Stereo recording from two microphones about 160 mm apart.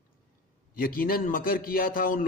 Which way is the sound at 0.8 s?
65° left (ahead or behind).